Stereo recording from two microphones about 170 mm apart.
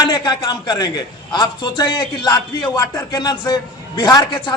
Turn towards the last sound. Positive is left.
turn(degrees=25)  # may be behind; listen again after turning